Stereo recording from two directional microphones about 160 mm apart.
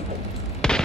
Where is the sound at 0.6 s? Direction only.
5° left (ahead or behind).